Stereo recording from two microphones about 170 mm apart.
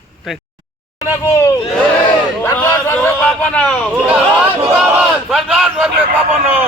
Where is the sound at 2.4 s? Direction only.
10° left (ahead or behind).